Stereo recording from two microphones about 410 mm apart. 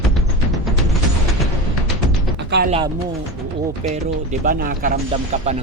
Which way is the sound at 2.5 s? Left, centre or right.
Right.